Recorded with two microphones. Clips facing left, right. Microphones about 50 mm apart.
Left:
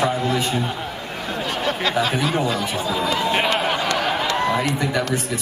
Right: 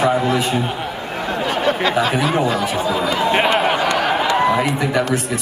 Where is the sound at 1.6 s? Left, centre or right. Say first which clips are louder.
Right 3 dB; centre.